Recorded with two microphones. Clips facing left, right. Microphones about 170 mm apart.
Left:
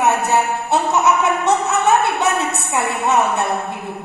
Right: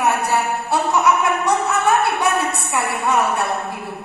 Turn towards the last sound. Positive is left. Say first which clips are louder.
# left 2 dB
turn(degrees=25)  # may be behind; listen again after turning